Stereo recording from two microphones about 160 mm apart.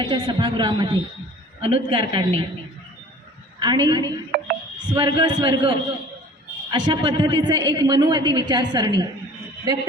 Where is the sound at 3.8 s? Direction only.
25° right (ahead or behind).